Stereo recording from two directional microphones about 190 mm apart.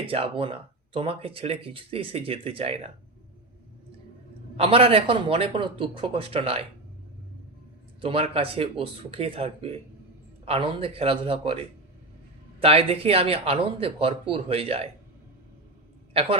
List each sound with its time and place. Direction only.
0.0 s speech: 30° right (ahead or behind)
4.5 s speech: 30° right (ahead or behind)
8.0 s speech: 30° right (ahead or behind)